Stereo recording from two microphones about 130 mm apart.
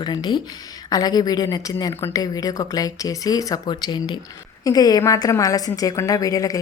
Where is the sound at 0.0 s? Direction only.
35° left (ahead or behind).